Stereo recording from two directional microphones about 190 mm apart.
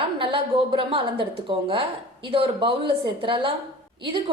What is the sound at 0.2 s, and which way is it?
A woman's voice, 25° right (ahead or behind).